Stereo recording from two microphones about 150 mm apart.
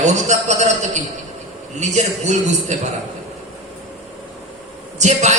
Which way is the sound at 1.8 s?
50° right (ahead or behind).